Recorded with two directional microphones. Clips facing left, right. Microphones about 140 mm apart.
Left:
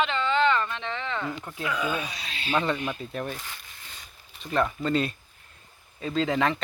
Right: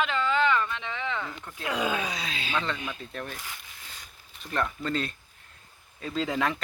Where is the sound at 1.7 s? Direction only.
85° right.